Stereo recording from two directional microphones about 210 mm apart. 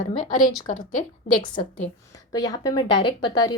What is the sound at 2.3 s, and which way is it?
Speech, 15° left (ahead or behind).